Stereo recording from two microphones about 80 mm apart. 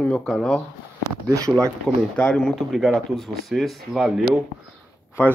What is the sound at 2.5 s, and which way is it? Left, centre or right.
Speech, centre.